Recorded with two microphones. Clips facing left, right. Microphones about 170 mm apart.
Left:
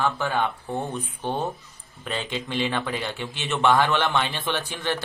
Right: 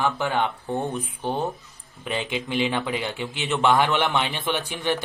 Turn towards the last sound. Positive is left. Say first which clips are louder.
# right 2 dB
turn(degrees=-15)  # may be behind; listen again after turning